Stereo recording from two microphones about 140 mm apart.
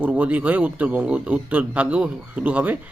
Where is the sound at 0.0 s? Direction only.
10° right (ahead or behind).